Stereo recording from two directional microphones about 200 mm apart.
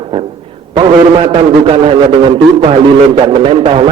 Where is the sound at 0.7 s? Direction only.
25° right (ahead or behind).